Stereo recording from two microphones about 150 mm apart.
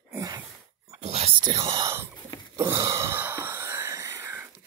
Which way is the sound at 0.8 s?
45° right (ahead or behind).